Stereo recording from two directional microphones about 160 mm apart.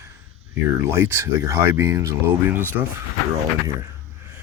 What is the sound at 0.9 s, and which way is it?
Speech, 15° right (ahead or behind).